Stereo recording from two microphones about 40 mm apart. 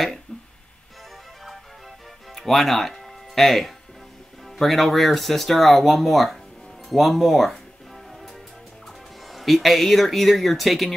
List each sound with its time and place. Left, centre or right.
0.3 s music: left
2.3 s speech: centre
6.9 s music: centre
8.8 s speech: centre